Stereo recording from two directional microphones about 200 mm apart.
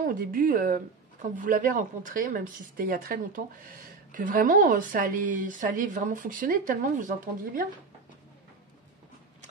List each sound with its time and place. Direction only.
0.0 s a woman's voice: 45° right (ahead or behind)